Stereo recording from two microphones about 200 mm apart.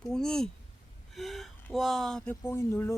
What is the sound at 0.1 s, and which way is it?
Speech, 5° left (ahead or behind).